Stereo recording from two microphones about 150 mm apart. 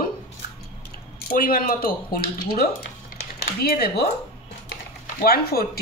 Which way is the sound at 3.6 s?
90° left.